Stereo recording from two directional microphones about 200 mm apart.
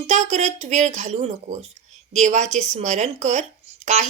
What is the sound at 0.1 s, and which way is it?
A woman's voice, 35° right (ahead or behind).